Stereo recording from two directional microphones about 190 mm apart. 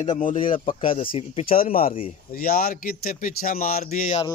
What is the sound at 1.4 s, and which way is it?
Speech, 45° left (ahead or behind).